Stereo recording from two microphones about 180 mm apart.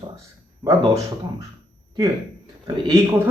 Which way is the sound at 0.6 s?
25° right (ahead or behind).